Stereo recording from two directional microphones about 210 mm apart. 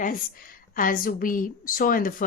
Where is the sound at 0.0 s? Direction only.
40° left (ahead or behind).